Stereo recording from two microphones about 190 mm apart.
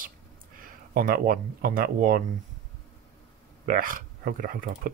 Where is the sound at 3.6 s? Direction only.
45° right (ahead or behind).